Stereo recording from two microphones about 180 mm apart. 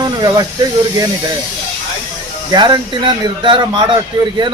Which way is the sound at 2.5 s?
25° right (ahead or behind).